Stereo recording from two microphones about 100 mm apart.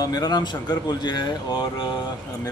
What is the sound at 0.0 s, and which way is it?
Speech, 40° left (ahead or behind).